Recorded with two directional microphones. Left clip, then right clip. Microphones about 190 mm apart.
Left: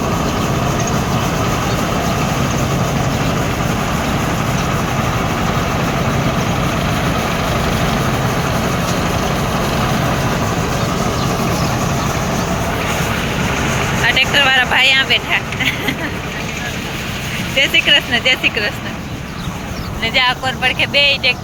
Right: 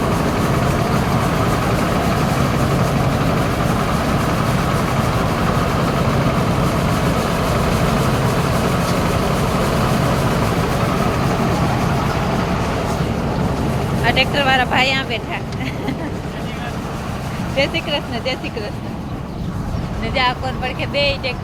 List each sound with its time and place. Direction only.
0.0 s vehicle: 5° right (ahead or behind)
9.8 s vehicle: 15° right (ahead or behind)
10.2 s vehicle: 5° right (ahead or behind)
14.0 s vehicle: 5° right (ahead or behind)
17.6 s speech: 5° left (ahead or behind)
20.1 s speech: 5° right (ahead or behind)